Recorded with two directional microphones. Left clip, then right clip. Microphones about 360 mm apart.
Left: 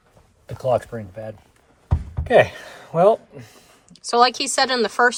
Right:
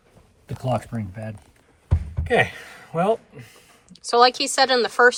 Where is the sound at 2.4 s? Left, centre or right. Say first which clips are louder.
Left 1 dB; centre.